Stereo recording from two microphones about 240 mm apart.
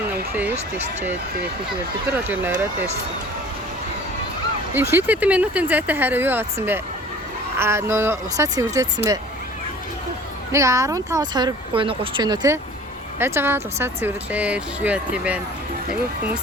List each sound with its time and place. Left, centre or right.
2.3 s speech: centre
4.7 s speech: centre
10.5 s speech: centre